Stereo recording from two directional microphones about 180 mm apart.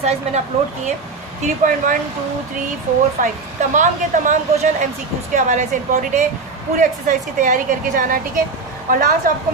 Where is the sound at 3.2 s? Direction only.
45° right (ahead or behind).